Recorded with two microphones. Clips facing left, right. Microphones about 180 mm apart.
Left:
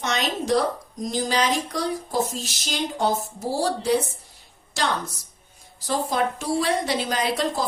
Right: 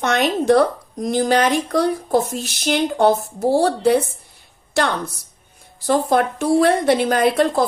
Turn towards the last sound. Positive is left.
turn(degrees=-55)  # may be behind; listen again after turning